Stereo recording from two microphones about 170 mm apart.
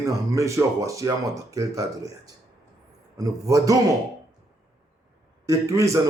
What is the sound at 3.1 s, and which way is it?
Speech, 20° right (ahead or behind).